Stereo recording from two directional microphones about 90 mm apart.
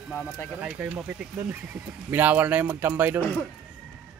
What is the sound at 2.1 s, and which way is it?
Speech, 20° right (ahead or behind).